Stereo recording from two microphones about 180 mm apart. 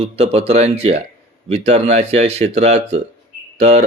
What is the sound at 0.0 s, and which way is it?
Speech, 35° right (ahead or behind).